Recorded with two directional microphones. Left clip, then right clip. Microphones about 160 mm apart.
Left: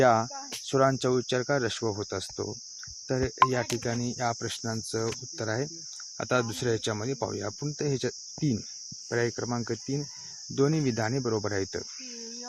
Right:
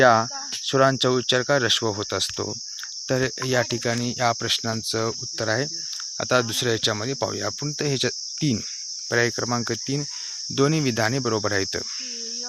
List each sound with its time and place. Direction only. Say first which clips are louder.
0.0 s cricket: right 6 dB; 10° right (ahead or behind)